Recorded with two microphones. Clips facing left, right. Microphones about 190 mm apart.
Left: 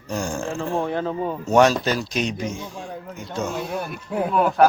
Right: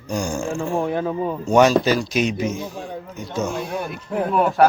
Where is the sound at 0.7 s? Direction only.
15° right (ahead or behind).